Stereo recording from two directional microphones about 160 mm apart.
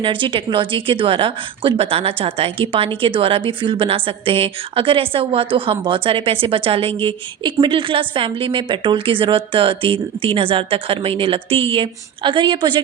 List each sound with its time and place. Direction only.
0.0 s a woman's voice: 30° right (ahead or behind)